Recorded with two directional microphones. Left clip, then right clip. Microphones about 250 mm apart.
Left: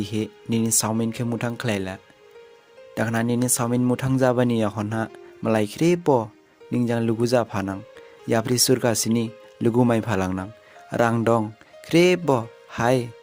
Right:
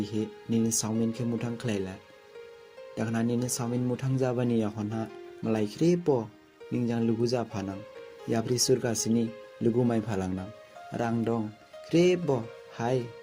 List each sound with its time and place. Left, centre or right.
0.0 s speech: left